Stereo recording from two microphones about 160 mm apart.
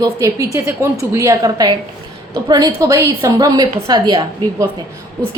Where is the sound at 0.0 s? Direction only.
20° right (ahead or behind).